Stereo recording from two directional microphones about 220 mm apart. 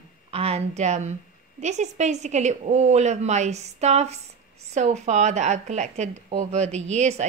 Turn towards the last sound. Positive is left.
turn(degrees=-30)  # may be behind; listen again after turning